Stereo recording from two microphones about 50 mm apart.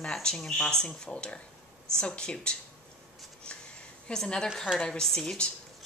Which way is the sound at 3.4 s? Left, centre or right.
Left.